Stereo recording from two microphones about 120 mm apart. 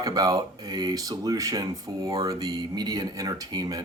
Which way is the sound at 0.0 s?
35° right (ahead or behind).